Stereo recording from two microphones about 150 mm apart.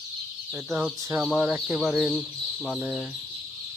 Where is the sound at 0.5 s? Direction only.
5° right (ahead or behind).